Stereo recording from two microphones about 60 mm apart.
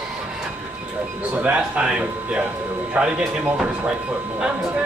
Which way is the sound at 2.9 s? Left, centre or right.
Centre.